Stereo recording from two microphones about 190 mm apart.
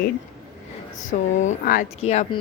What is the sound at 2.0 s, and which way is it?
Speech, 35° left (ahead or behind).